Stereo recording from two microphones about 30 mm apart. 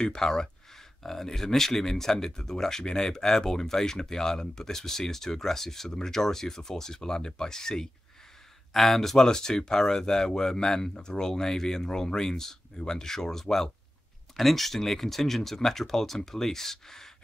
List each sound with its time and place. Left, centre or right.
0.0 s speech: left
8.7 s speech: centre
9.2 s speech: left
14.3 s speech: centre